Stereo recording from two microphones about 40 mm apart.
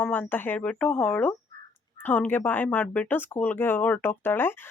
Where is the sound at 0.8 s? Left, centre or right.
Left.